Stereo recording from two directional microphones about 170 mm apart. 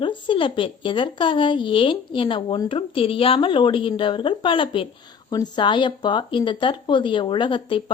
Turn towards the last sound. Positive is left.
turn(degrees=30)  # may be behind; listen again after turning